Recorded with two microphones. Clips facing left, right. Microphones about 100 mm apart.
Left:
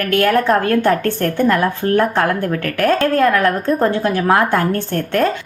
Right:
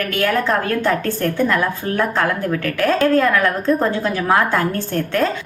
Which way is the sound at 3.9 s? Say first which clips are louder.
Left 3 dB; 50° left (ahead or behind).